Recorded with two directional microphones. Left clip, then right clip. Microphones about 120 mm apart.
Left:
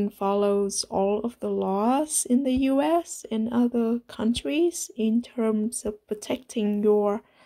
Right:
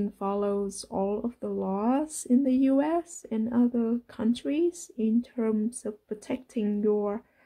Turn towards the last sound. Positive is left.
turn(degrees=40)  # may be behind; listen again after turning